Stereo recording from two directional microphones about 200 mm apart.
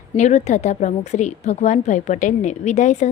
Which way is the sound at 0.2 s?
35° left (ahead or behind).